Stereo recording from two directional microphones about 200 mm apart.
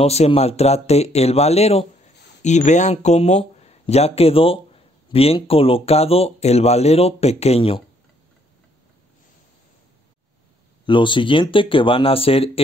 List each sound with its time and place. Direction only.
0.0 s speech: 30° left (ahead or behind)
10.9 s speech: 25° left (ahead or behind)